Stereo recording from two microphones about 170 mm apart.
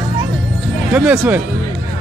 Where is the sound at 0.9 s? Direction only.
10° right (ahead or behind).